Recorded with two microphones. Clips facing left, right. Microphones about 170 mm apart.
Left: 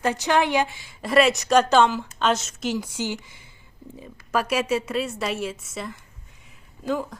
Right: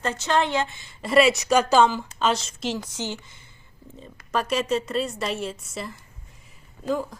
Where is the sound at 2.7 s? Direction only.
10° left (ahead or behind).